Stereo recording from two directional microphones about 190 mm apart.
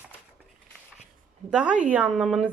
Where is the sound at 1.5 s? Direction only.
5° right (ahead or behind).